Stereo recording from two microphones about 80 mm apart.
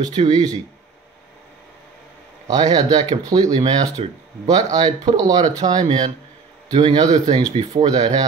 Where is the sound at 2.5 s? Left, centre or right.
Right.